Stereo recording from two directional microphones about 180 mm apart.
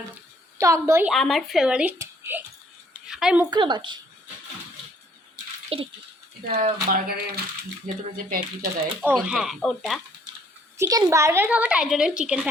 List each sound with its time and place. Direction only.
0.6 s a woman's voice: 15° right (ahead or behind)
1.0 s speech: centre (ahead or behind)
2.0 s a sound: 10° right (ahead or behind)
3.5 s a woman's voice: 25° right (ahead or behind)
5.7 s rattle: 30° right (ahead or behind)
6.5 s speech: 50° right (ahead or behind)
9.0 s speech: 5° right (ahead or behind)
10.8 s a woman's voice: 20° right (ahead or behind)